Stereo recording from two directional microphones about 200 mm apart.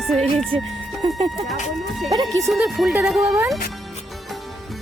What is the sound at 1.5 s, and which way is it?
Speech, centre (ahead or behind).